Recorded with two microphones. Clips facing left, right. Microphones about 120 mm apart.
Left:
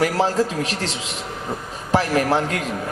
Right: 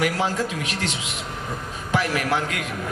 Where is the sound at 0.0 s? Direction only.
40° left (ahead or behind).